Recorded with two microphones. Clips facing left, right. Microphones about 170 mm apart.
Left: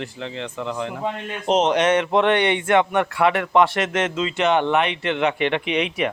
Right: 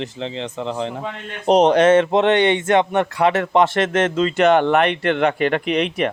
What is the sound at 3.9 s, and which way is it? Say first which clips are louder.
Speech: right 5 dB; 50° right (ahead or behind).